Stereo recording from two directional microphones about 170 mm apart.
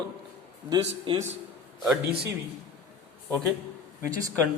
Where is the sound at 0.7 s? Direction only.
25° right (ahead or behind).